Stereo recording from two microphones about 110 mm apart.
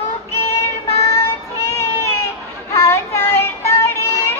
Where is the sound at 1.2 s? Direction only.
25° left (ahead or behind).